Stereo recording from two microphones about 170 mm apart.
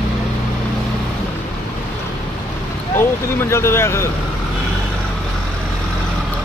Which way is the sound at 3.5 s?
15° left (ahead or behind).